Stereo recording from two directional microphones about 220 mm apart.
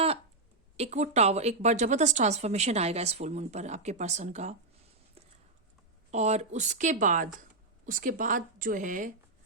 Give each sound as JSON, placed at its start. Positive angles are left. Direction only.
{"t": 0.8, "sound": "a woman's voice", "side_deg": -30}
{"t": 6.1, "sound": "a woman's voice", "side_deg": -30}